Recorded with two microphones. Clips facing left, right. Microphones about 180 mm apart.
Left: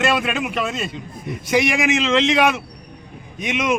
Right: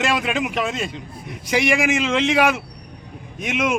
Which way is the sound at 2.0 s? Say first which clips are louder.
Left 1 dB; 10° right (ahead or behind).